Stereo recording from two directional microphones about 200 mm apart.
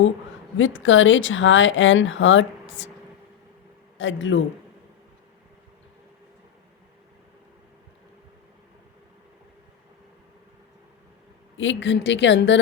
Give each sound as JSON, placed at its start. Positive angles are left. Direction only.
{"t": 0.5, "sound": "speech", "side_deg": 70}
{"t": 3.9, "sound": "speech", "side_deg": 70}
{"t": 11.5, "sound": "a woman's voice", "side_deg": 70}